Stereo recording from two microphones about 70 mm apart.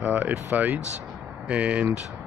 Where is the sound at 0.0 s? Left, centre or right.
Right.